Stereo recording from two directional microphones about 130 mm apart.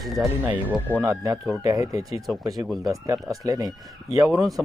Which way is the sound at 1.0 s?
25° right (ahead or behind).